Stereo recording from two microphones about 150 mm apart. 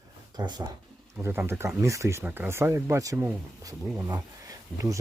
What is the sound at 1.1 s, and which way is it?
Speech, 10° right (ahead or behind).